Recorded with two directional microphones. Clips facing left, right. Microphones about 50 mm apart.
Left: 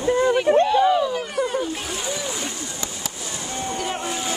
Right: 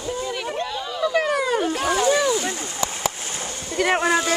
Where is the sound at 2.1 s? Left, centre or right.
Right.